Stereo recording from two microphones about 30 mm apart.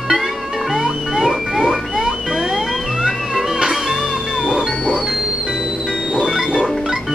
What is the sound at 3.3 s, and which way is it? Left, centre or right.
Music, centre.